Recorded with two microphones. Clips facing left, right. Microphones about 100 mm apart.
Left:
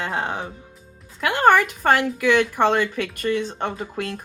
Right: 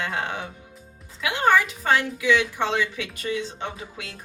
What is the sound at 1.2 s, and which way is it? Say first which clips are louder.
Speech: left 4 dB; 50° left (ahead or behind).